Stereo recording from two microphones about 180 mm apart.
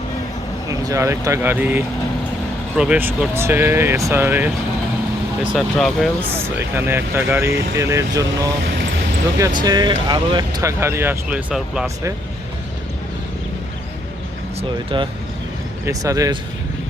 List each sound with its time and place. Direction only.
0.7 s speech: 15° right (ahead or behind)
5.5 s speech: centre (ahead or behind)
6.3 s speech: 15° right (ahead or behind)
9.6 s speech: 25° right (ahead or behind); by 11.9 s 5° right (ahead or behind)
14.9 s speech: 25° right (ahead or behind)